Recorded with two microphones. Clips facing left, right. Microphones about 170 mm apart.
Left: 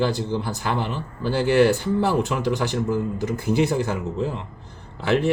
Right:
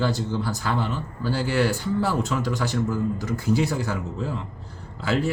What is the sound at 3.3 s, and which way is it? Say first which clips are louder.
Speech: left 2 dB; 60° left (ahead or behind).